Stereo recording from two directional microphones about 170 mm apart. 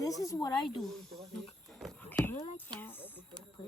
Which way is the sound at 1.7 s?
Centre (ahead or behind).